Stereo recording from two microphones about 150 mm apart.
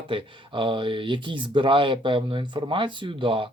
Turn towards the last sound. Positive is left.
turn(degrees=-35)  # may be behind; listen again after turning